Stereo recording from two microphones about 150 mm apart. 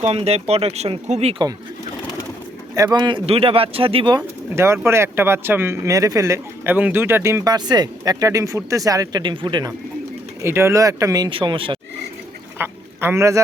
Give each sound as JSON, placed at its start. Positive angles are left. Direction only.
{"t": 0.0, "sound": "speech", "side_deg": -45}
{"t": 2.7, "sound": "speech", "side_deg": -25}
{"t": 4.5, "sound": "speech", "side_deg": -15}
{"t": 10.4, "sound": "speech", "side_deg": -15}
{"t": 12.5, "sound": "a sound", "side_deg": -15}